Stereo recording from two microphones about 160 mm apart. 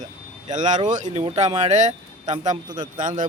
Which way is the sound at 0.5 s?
50° right (ahead or behind).